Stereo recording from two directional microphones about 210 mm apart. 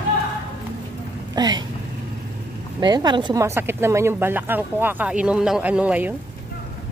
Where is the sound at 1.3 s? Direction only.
20° right (ahead or behind).